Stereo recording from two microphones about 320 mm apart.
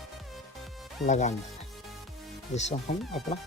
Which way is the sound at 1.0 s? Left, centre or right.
Left.